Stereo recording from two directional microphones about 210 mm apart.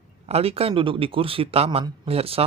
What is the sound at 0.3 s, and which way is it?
Speech, 30° right (ahead or behind).